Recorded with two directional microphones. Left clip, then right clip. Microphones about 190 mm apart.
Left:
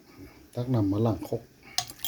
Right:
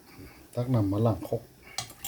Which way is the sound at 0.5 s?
5° left (ahead or behind).